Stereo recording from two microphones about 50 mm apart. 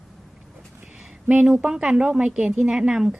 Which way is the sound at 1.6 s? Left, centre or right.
Centre.